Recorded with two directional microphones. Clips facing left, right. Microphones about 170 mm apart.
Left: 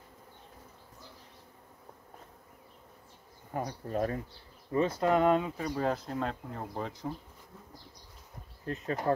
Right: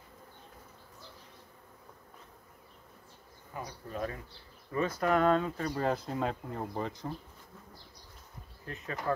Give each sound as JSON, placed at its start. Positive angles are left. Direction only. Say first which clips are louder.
{"t": 3.5, "sound": "speech", "louder": "left 6 dB", "side_deg": 45}
{"t": 4.7, "sound": "speech", "louder": "left 2 dB", "side_deg": 25}
{"t": 5.8, "sound": "speech", "louder": "even", "side_deg": 0}
{"t": 8.6, "sound": "speech", "louder": "left 5 dB", "side_deg": 35}